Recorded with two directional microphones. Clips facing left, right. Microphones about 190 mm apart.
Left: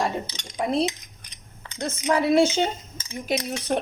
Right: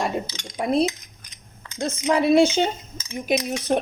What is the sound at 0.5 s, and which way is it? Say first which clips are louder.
Speech: right 3 dB; 15° right (ahead or behind).